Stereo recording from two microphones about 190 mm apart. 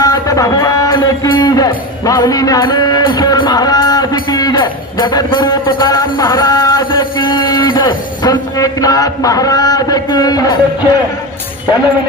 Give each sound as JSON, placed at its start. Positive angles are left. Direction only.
{"t": 0.0, "sound": "a man's voice", "side_deg": 20}